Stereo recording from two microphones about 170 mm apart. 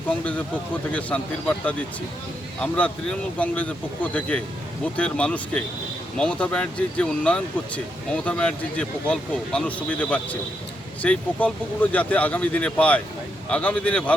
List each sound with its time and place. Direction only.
0.9 s speech: 10° left (ahead or behind)